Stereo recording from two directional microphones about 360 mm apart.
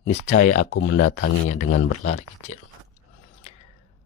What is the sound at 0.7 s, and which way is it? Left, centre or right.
Speech, left.